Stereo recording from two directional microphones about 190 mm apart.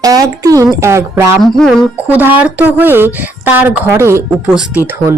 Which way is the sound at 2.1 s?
10° right (ahead or behind).